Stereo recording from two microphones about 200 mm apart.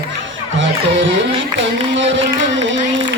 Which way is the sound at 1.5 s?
70° right (ahead or behind).